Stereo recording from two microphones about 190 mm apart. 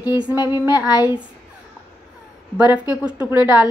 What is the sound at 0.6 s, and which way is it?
Speech, 10° right (ahead or behind).